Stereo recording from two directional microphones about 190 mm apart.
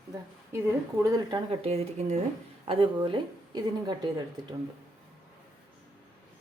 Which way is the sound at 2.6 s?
25° right (ahead or behind).